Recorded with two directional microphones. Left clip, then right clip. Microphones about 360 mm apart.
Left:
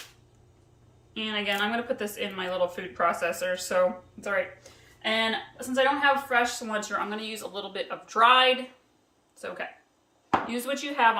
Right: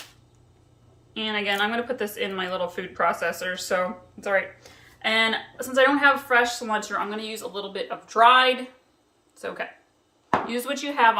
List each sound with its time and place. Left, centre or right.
1.1 s a woman's voice: centre